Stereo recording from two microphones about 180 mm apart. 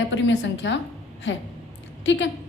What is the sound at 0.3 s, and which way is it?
A woman's voice, 90° left.